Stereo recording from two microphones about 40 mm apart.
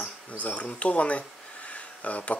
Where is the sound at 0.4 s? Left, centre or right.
Left.